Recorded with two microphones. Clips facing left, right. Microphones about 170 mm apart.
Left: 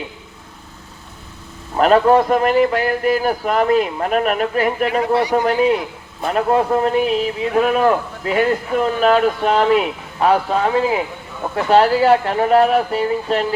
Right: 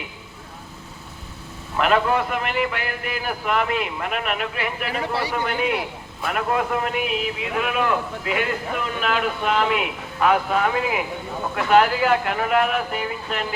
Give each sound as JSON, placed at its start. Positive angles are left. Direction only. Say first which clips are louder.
{"t": 1.7, "sound": "a man's voice", "louder": "left 8 dB", "side_deg": 40}